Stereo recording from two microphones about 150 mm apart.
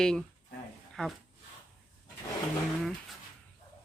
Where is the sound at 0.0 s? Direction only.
5° left (ahead or behind).